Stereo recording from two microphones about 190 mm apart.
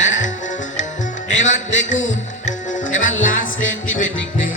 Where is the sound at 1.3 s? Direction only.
40° left (ahead or behind).